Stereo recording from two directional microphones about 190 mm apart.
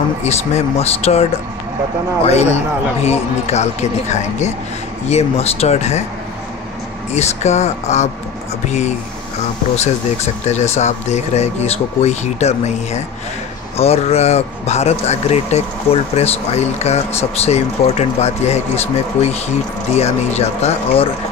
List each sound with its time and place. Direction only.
0.2 s a man's voice: 35° left (ahead or behind)
2.2 s a man's voice: 35° left (ahead or behind)
7.2 s a man's voice: 35° left (ahead or behind)
10.4 s a man's voice: 35° left (ahead or behind)